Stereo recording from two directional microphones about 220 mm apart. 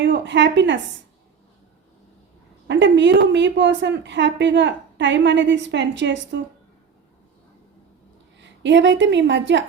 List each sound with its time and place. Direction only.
0.0 s a woman's voice: 55° right (ahead or behind)
2.6 s a woman's voice: 55° right (ahead or behind)
8.6 s a woman's voice: 55° right (ahead or behind)